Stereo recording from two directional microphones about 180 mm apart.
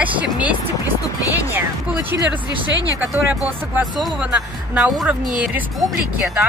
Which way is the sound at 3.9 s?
5° right (ahead or behind).